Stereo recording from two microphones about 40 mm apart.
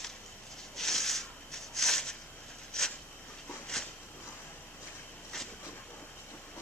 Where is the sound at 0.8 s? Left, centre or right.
Centre.